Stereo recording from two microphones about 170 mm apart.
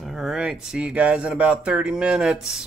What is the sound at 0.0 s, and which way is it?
Speech, centre (ahead or behind).